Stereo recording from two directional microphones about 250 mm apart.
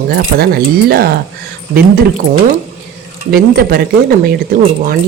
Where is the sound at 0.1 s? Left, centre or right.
Right.